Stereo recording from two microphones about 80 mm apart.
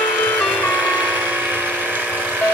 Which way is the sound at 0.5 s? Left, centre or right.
Centre.